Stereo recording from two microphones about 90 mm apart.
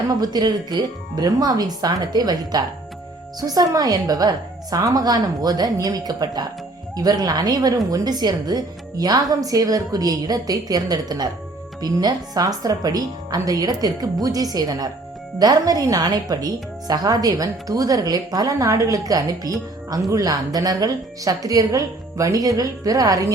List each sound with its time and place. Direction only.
0.1 s a woman's voice: 45° right (ahead or behind)